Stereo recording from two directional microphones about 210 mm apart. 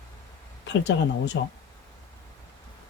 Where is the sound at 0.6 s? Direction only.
55° left (ahead or behind).